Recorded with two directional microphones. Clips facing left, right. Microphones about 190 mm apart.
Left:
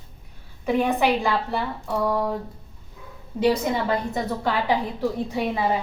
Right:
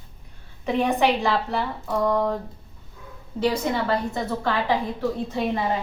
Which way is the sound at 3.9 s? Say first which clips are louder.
Even; 15° left (ahead or behind).